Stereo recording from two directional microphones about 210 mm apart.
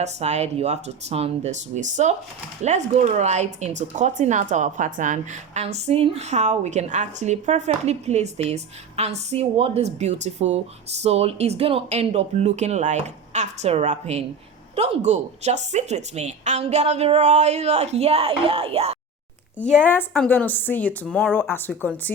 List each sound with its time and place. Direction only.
0.0 s speech: 30° right (ahead or behind)
19.9 s speech: 10° left (ahead or behind)